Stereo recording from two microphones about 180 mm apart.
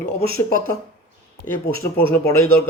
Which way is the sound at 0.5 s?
15° left (ahead or behind).